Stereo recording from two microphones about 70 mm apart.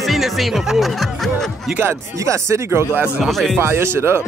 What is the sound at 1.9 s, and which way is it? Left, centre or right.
Speech, right.